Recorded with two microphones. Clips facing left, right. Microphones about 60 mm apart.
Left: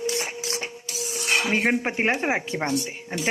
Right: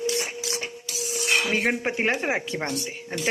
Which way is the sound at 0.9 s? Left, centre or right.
Left.